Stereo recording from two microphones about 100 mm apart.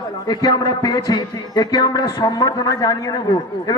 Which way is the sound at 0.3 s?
40° left (ahead or behind).